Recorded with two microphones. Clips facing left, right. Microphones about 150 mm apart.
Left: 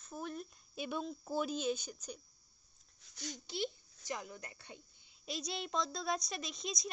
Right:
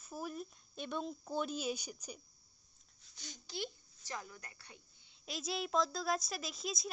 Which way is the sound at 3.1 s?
75° left (ahead or behind).